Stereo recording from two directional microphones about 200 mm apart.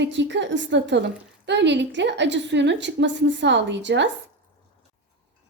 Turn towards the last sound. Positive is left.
turn(degrees=-65)  # may be behind; listen again after turning